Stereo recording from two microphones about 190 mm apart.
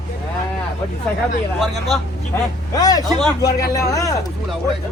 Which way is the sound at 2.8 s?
20° left (ahead or behind).